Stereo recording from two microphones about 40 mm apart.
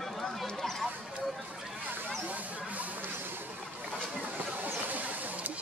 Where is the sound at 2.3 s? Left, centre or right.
Right.